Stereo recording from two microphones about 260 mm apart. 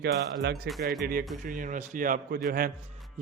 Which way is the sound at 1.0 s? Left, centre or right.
Right.